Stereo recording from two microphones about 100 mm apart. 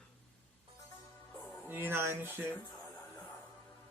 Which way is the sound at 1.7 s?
25° right (ahead or behind).